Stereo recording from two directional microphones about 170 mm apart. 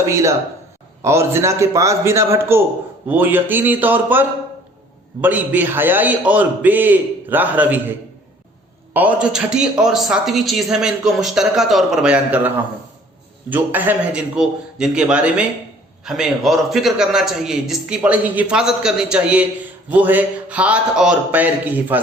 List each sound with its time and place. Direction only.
0.0 s a man's voice: 15° right (ahead or behind)
8.9 s a man's voice: 10° right (ahead or behind)